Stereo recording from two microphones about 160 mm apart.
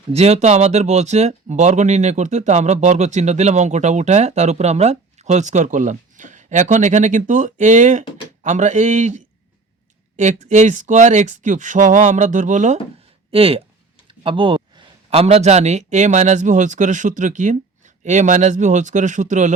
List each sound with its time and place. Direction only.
0.1 s speech: 40° right (ahead or behind)
13.3 s speech: 35° right (ahead or behind)